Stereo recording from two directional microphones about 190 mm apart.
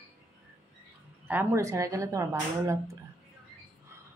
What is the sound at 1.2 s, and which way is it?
Speech, 10° right (ahead or behind).